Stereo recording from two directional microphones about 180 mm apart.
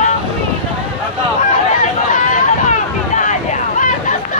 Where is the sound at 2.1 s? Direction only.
50° left (ahead or behind).